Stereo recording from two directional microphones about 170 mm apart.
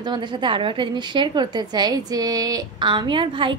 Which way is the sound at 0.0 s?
25° right (ahead or behind).